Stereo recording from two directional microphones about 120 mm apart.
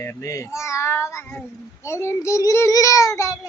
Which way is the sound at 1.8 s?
20° left (ahead or behind).